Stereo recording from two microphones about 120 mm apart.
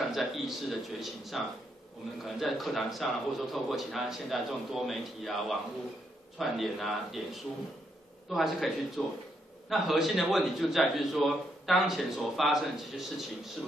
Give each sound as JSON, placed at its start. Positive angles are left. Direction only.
{"t": 0.0, "sound": "a man's voice", "side_deg": 0}